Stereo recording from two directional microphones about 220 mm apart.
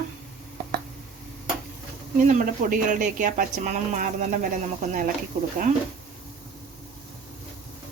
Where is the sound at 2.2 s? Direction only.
35° right (ahead or behind).